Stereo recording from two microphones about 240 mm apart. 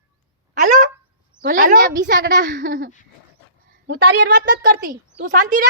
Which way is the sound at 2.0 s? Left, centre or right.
Right.